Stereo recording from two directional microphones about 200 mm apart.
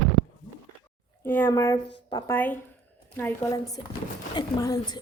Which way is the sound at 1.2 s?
10° left (ahead or behind).